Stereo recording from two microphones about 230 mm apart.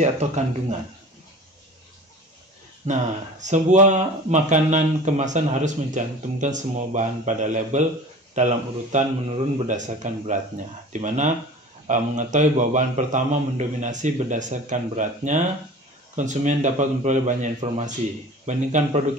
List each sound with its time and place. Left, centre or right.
0.0 s speech: right
2.9 s speech: right